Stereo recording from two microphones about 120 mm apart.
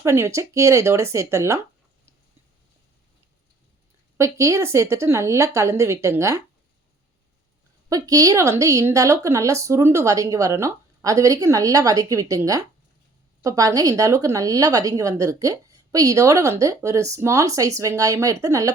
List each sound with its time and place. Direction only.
0.0 s a woman's voice: 25° right (ahead or behind)
4.2 s a woman's voice: 25° right (ahead or behind)
7.9 s a woman's voice: 30° right (ahead or behind)